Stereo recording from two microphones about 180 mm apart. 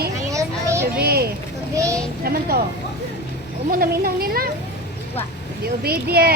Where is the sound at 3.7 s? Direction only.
55° right (ahead or behind).